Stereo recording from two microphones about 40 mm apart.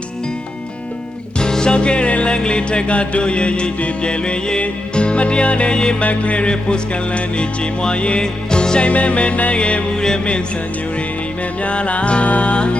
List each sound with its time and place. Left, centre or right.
1.4 s music: centre
6.0 s music: left
8.9 s music: left
9.9 s music: centre
11.6 s music: left